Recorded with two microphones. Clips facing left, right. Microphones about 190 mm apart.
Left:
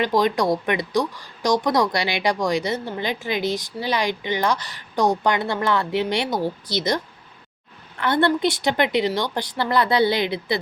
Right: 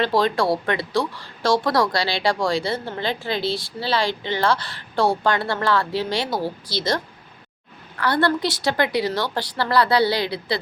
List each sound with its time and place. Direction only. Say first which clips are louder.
0.0 s a woman's voice: even; 15° left (ahead or behind)